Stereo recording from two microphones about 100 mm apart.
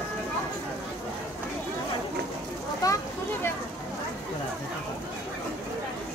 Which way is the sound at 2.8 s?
35° left (ahead or behind).